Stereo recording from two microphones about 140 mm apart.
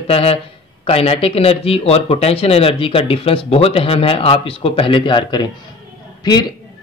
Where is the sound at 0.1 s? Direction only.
45° left (ahead or behind).